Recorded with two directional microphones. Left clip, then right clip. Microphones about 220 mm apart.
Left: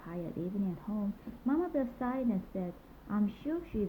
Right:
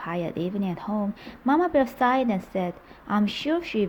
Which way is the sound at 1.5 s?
35° right (ahead or behind).